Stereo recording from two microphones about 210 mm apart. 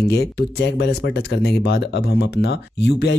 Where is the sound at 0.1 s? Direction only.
55° left (ahead or behind).